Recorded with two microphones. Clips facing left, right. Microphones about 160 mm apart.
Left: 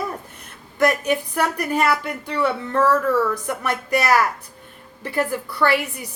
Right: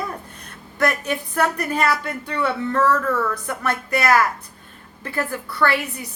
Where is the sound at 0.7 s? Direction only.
15° left (ahead or behind).